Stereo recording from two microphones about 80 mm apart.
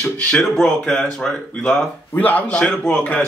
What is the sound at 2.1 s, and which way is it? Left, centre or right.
Speech, left.